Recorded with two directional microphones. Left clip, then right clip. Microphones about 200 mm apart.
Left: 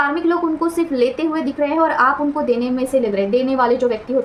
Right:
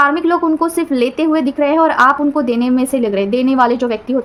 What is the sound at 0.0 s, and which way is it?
A woman's voice, 50° right (ahead or behind).